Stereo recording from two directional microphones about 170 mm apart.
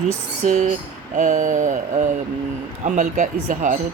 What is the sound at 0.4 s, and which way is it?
Speech, 50° right (ahead or behind).